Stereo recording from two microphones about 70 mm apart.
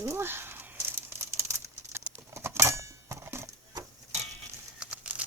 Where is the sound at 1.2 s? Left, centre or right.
Right.